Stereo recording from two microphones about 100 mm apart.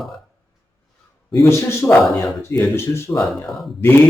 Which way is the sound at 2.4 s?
25° left (ahead or behind).